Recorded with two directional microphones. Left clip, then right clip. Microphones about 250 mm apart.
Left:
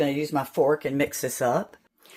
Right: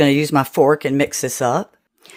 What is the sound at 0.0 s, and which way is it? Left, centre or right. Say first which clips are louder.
Speech: right 10 dB; right.